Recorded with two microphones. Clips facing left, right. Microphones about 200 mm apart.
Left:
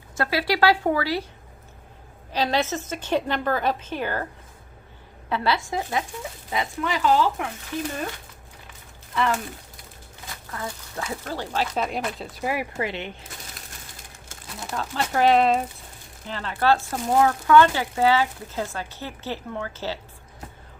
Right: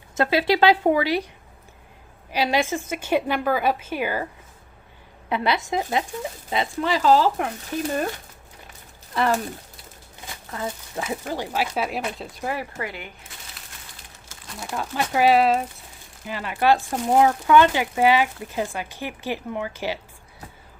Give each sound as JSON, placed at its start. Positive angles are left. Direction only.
{"t": 0.2, "sound": "speech", "side_deg": -25}
{"t": 2.3, "sound": "speech", "side_deg": -10}
{"t": 5.3, "sound": "speech", "side_deg": -20}
{"t": 9.1, "sound": "speech", "side_deg": -40}
{"t": 10.5, "sound": "speech", "side_deg": -20}
{"t": 12.8, "sound": "speech", "side_deg": 25}
{"t": 14.7, "sound": "speech", "side_deg": -10}